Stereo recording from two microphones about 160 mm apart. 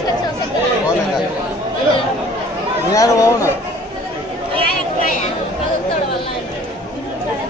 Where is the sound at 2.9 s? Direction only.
20° left (ahead or behind).